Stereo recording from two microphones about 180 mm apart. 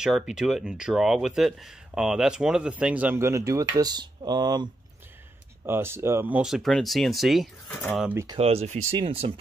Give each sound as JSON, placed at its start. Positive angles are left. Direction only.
{"t": 0.0, "sound": "speech", "side_deg": -5}
{"t": 5.7, "sound": "speech", "side_deg": -15}
{"t": 8.4, "sound": "speech", "side_deg": -35}